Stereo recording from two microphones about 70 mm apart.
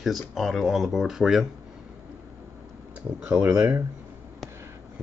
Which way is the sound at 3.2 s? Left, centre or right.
Right.